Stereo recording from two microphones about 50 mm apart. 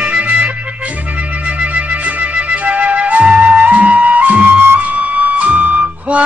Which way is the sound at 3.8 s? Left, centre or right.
Right.